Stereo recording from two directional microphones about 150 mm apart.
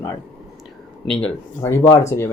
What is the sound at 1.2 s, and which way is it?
Speech, 20° left (ahead or behind).